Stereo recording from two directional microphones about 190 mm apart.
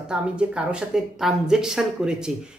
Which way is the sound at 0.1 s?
5° right (ahead or behind).